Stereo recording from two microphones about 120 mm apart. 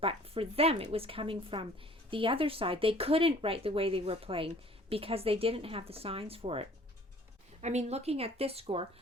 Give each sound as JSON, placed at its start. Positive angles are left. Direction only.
{"t": 0.0, "sound": "speech", "side_deg": -50}
{"t": 7.6, "sound": "speech", "side_deg": -65}